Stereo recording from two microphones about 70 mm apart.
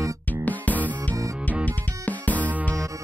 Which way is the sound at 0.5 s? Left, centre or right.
Left.